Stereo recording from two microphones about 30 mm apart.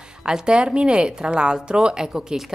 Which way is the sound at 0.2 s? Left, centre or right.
Right.